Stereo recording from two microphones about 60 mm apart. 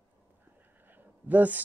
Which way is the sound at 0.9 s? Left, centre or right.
Right.